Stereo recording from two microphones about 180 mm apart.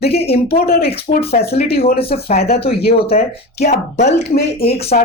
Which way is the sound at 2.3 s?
60° left (ahead or behind).